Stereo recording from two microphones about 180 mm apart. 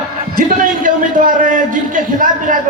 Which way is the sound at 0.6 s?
50° right (ahead or behind).